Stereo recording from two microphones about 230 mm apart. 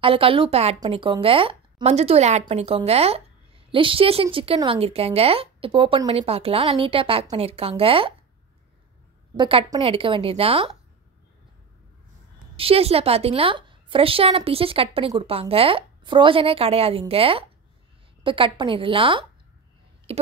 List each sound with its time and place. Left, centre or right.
0.0 s speech: right
9.4 s speech: right
12.5 s speech: right
20.1 s a sound: right